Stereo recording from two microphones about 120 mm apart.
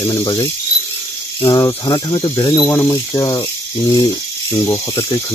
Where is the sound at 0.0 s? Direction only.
30° left (ahead or behind).